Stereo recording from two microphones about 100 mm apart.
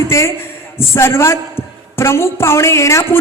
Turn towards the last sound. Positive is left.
turn(degrees=30)  # may be behind; listen again after turning